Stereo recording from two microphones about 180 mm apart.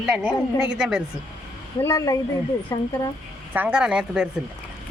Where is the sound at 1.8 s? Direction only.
20° left (ahead or behind).